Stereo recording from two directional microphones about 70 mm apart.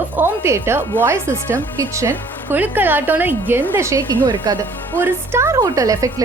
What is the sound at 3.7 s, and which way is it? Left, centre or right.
Speech, right.